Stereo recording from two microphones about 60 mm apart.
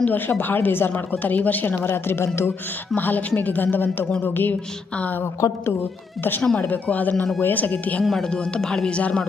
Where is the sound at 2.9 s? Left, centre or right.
Left.